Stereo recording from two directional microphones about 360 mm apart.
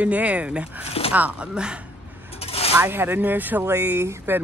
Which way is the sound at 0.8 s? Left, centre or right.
Centre.